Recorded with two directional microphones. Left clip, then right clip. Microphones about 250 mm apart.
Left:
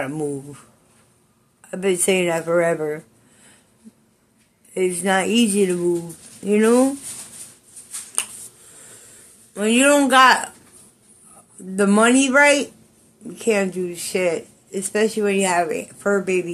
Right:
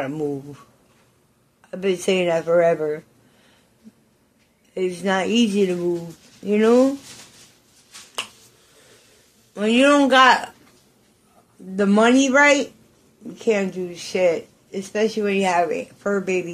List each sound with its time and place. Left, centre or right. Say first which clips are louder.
0.0 s speech: even; centre
1.6 s speech: left 2 dB; centre
4.7 s speech: left 2 dB; centre
9.5 s speech: even; centre
11.7 s speech: left 1 dB; centre